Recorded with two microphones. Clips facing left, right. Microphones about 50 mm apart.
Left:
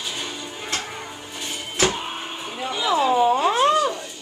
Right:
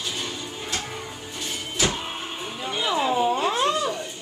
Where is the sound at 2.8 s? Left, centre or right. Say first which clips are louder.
Left 4 dB; centre.